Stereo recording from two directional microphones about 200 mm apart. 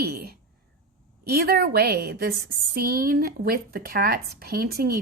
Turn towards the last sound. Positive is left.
turn(degrees=-50)  # may be behind; listen again after turning